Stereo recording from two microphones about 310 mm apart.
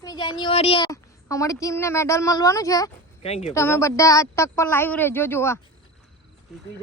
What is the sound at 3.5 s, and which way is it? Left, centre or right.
A woman's voice, centre.